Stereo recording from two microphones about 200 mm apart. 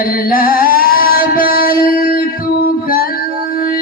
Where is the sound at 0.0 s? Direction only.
45° left (ahead or behind).